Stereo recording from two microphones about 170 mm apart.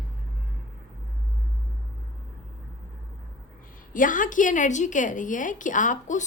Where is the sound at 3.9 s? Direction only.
50° left (ahead or behind).